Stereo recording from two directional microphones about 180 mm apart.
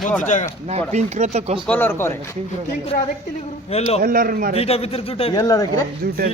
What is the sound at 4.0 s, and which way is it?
Speech, 55° right (ahead or behind).